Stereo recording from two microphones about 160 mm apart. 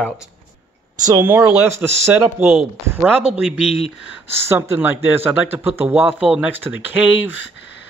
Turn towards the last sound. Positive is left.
turn(degrees=-10)  # may be behind; listen again after turning